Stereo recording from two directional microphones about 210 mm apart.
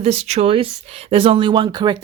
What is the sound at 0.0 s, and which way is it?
Speech, 30° right (ahead or behind).